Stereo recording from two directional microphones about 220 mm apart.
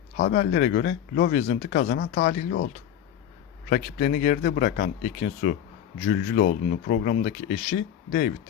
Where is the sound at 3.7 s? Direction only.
35° left (ahead or behind).